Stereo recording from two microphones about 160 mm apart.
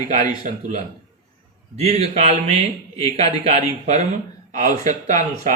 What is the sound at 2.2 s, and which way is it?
Speech, 40° right (ahead or behind).